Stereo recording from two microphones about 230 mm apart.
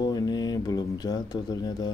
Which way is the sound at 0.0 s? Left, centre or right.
Centre.